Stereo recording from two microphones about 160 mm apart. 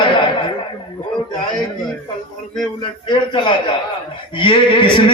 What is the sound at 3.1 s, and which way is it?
A man's voice, 30° left (ahead or behind).